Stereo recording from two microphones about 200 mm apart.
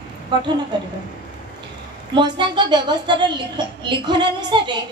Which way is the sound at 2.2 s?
20° right (ahead or behind).